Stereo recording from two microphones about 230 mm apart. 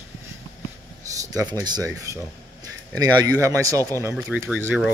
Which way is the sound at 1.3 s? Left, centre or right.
Centre.